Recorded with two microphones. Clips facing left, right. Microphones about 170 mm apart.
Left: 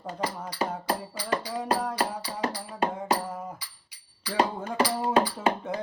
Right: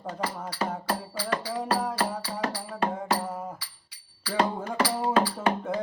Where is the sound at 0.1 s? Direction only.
20° left (ahead or behind).